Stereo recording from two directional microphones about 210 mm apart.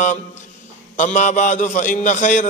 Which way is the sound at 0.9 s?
35° left (ahead or behind).